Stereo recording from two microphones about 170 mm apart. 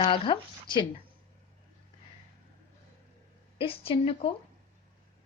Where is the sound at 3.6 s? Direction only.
35° left (ahead or behind).